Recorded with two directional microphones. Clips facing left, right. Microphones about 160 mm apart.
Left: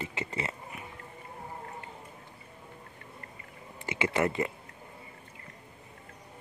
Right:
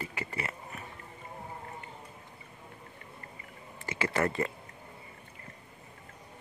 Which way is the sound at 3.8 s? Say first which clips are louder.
Left 2 dB; 20° left (ahead or behind).